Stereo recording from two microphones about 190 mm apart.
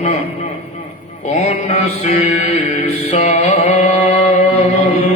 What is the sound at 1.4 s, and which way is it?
Mantra, 35° left (ahead or behind).